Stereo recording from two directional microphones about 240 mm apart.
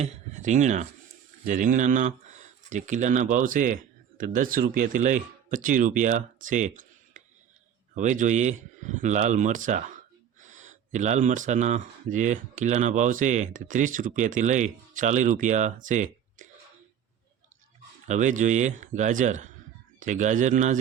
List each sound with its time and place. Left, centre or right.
0.0 s speech: right
18.1 s speech: right